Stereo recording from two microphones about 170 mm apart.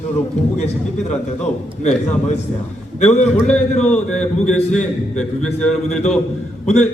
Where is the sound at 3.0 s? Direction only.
45° left (ahead or behind).